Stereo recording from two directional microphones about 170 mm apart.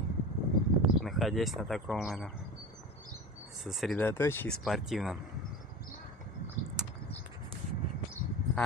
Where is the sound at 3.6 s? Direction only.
Centre (ahead or behind).